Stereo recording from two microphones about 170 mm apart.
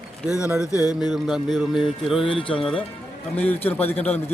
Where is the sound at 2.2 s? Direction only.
30° left (ahead or behind).